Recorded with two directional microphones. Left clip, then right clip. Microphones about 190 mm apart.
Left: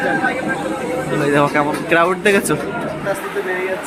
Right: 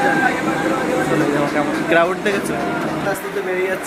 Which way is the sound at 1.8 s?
20° left (ahead or behind).